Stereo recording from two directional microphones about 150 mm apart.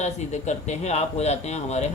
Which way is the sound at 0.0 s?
50° left (ahead or behind).